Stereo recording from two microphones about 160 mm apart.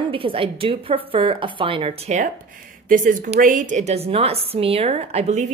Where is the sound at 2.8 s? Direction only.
55° right (ahead or behind).